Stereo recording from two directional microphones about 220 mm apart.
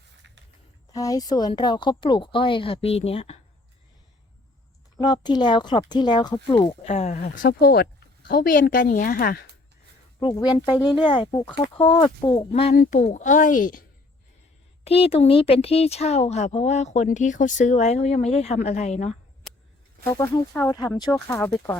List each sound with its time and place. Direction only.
0.9 s speech: 15° left (ahead or behind)
5.0 s speech: 20° left (ahead or behind); by 9.5 s 45° left (ahead or behind)
10.2 s speech: 15° left (ahead or behind)
12.7 s speech: 40° left (ahead or behind)
14.8 s speech: 25° left (ahead or behind)
20.1 s speech: 15° left (ahead or behind)